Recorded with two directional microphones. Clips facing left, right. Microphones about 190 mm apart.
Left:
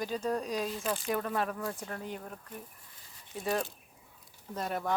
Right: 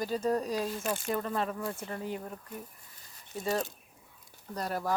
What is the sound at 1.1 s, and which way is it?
Speech, 5° left (ahead or behind).